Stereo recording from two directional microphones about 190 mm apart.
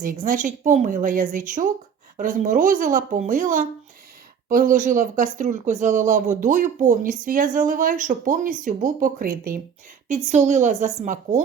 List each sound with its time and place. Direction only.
0.0 s a woman's voice: 45° right (ahead or behind)